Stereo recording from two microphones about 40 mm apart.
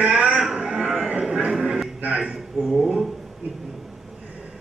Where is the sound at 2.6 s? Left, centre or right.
Right.